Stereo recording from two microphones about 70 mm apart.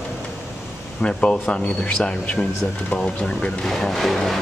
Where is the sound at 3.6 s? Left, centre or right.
Centre.